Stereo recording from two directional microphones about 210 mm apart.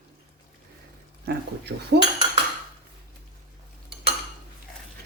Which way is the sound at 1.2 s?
50° right (ahead or behind).